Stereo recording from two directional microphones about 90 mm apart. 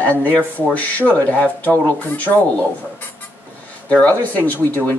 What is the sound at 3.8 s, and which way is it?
Speech, 20° left (ahead or behind).